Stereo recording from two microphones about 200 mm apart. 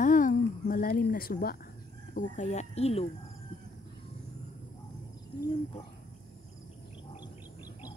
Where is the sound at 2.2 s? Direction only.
35° left (ahead or behind).